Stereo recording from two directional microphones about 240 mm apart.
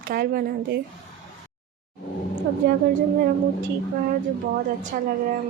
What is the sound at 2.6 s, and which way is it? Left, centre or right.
Speech, right.